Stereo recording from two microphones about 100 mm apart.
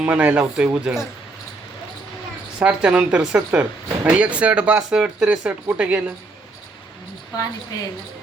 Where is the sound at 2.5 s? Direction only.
10° right (ahead or behind).